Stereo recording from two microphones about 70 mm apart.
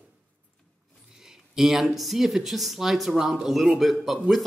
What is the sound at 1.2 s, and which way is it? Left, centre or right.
A man's voice, centre.